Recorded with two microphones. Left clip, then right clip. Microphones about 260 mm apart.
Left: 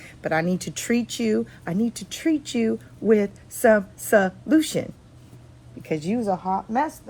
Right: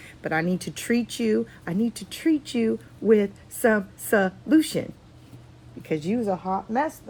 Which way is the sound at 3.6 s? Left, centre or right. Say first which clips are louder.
Left 4 dB; centre.